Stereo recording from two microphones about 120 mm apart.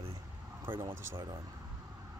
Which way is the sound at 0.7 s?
20° right (ahead or behind).